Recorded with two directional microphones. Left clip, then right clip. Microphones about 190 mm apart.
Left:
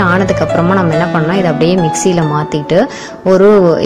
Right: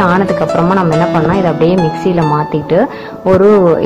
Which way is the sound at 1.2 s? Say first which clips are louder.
Right 1 dB; 35° left (ahead or behind).